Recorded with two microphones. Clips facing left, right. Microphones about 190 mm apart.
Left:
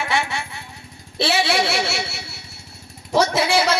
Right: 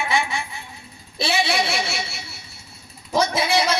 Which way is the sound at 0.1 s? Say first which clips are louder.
Even; 70° left (ahead or behind).